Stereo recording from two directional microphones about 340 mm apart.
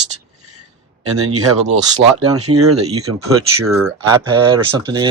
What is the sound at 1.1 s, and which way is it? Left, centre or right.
Speech, right.